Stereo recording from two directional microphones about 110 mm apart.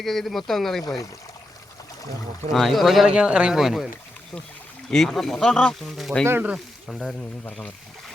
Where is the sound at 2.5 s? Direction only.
Centre (ahead or behind).